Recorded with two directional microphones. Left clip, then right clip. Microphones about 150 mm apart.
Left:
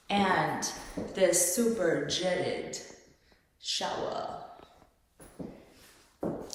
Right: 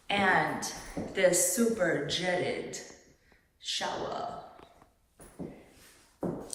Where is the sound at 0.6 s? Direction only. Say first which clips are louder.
Left 1 dB; 25° left (ahead or behind).